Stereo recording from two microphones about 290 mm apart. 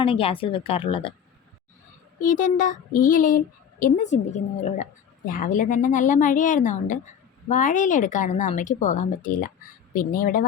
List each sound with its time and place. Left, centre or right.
0.0 s a woman's voice: centre
2.2 s a woman's voice: left